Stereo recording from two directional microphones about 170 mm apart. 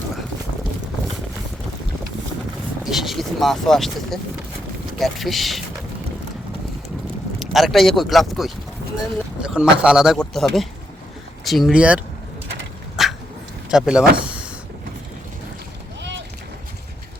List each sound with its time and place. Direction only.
2.8 s speech: centre (ahead or behind)
7.3 s speech: centre (ahead or behind)
13.0 s dog: centre (ahead or behind)
13.7 s speech: 5° right (ahead or behind)
16.0 s a sound: 90° right